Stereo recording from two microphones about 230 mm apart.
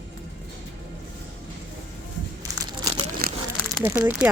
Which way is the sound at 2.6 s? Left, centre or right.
Right.